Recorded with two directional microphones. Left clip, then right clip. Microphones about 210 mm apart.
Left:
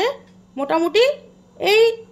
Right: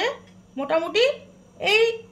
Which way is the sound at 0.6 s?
45° left (ahead or behind).